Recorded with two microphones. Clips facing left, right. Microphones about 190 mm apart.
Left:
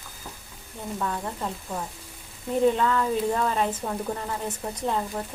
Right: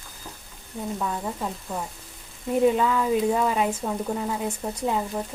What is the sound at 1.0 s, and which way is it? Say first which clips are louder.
Speech: left 1 dB; 5° right (ahead or behind).